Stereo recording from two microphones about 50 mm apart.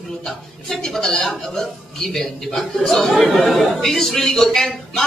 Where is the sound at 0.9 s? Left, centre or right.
Centre.